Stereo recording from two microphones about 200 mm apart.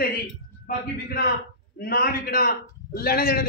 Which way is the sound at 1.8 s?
50° left (ahead or behind).